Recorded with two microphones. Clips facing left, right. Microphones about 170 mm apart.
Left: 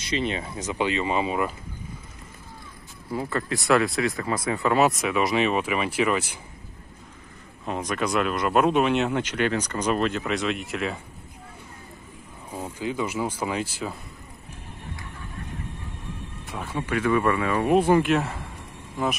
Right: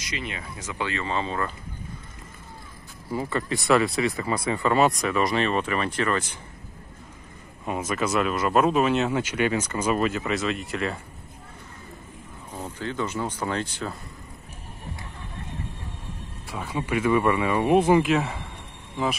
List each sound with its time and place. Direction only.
0.0 s speech: 25° left (ahead or behind)
3.1 s speech: centre (ahead or behind)
7.6 s speech: 5° right (ahead or behind)
12.4 s speech: 10° left (ahead or behind)
16.4 s speech: 5° right (ahead or behind)